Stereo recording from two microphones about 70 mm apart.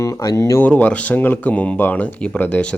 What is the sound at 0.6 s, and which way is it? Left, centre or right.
Speech, left.